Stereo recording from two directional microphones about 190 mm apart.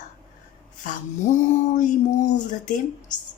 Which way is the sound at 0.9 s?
40° left (ahead or behind).